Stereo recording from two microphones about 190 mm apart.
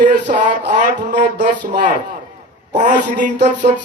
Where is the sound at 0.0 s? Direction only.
45° right (ahead or behind).